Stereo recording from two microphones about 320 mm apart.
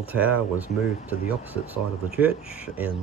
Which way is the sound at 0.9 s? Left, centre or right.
Centre.